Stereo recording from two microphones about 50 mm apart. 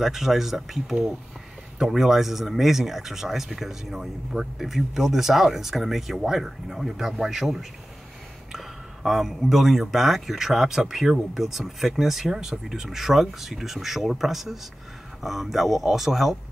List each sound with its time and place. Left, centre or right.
0.0 s a man's voice: centre